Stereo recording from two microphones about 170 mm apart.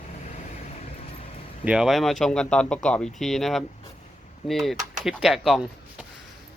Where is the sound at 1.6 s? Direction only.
5° right (ahead or behind).